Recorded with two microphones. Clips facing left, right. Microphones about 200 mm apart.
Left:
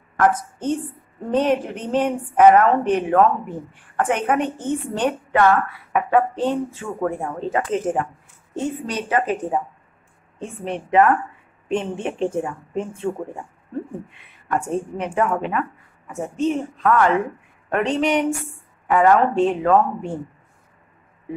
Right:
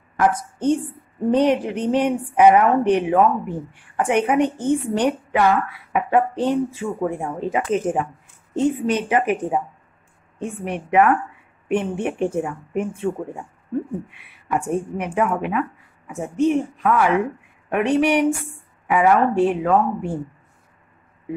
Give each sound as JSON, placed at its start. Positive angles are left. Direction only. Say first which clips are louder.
{"t": 0.2, "sound": "a woman's voice", "louder": "even", "side_deg": -10}
{"t": 10.7, "sound": "a woman's voice", "louder": "even", "side_deg": -10}
{"t": 14.1, "sound": "a woman's voice", "louder": "left 2 dB", "side_deg": -10}